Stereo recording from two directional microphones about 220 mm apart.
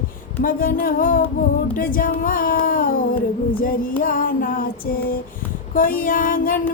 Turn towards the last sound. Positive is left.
turn(degrees=40)  # may be behind; listen again after turning